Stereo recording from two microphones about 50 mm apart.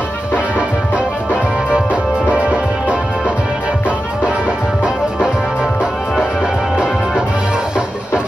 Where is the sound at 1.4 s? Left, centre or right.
Right.